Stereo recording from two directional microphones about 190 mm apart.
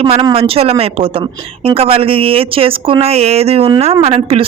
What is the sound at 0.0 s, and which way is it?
A woman's voice, 30° right (ahead or behind).